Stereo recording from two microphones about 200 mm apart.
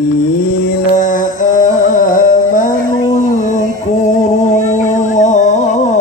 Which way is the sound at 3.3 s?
40° left (ahead or behind).